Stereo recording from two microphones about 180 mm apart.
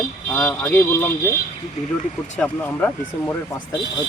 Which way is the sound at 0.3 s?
10° left (ahead or behind).